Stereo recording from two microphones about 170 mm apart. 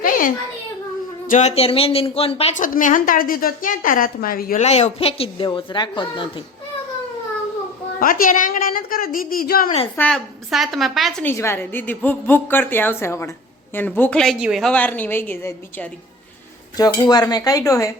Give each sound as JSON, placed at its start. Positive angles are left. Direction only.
{"t": 1.3, "sound": "a woman's voice", "side_deg": 40}
{"t": 2.6, "sound": "a woman's voice", "side_deg": 50}
{"t": 4.6, "sound": "a woman's voice", "side_deg": 40}
{"t": 7.9, "sound": "a woman's voice", "side_deg": 55}
{"t": 9.9, "sound": "a woman's voice", "side_deg": 5}
{"t": 11.3, "sound": "a woman's voice", "side_deg": 15}
{"t": 14.7, "sound": "a woman's voice", "side_deg": 10}
{"t": 16.7, "sound": "speech", "side_deg": 20}